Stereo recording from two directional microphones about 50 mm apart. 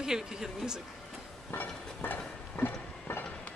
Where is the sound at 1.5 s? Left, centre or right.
Left.